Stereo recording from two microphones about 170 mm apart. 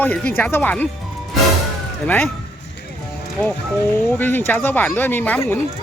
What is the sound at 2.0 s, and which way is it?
Speech, 10° left (ahead or behind).